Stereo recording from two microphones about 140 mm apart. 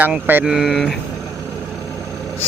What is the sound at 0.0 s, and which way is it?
Speech, 15° right (ahead or behind).